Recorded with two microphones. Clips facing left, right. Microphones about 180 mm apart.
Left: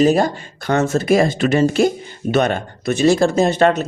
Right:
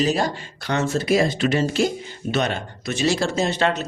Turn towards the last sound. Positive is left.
turn(degrees=50)  # may be behind; listen again after turning